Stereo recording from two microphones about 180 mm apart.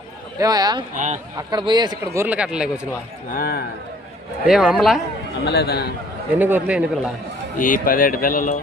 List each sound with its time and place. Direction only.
0.3 s a man's voice: 20° right (ahead or behind)
0.9 s speech: 40° right (ahead or behind)
1.4 s a man's voice: 25° right (ahead or behind)
2.2 s a man's voice: 5° right (ahead or behind)
3.2 s a man's voice: 55° left (ahead or behind)
4.4 s speech: 5° right (ahead or behind)
5.5 s a man's voice: 65° left (ahead or behind)
6.4 s a man's voice: 10° right (ahead or behind)
7.6 s speech: 50° left (ahead or behind)